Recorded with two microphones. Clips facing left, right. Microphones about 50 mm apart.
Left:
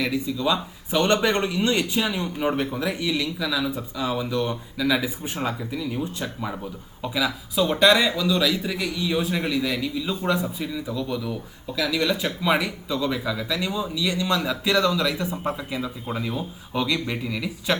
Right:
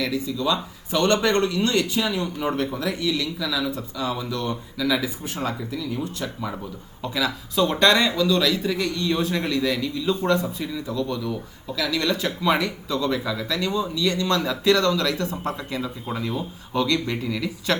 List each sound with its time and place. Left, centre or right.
0.0 s speech: centre